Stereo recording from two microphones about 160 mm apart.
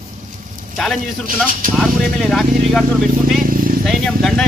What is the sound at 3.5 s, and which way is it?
Vehicle, 60° right (ahead or behind).